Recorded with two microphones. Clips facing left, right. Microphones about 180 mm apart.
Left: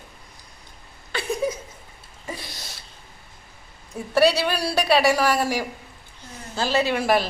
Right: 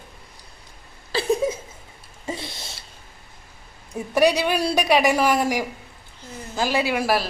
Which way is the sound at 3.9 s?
15° right (ahead or behind).